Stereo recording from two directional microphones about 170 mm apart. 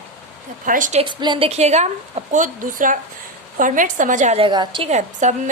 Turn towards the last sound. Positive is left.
turn(degrees=-45)  # may be behind; listen again after turning